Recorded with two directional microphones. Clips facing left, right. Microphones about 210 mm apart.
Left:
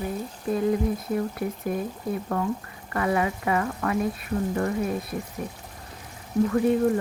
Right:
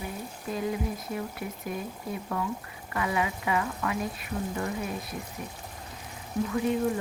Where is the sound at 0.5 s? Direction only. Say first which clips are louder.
Left 7 dB; 45° left (ahead or behind).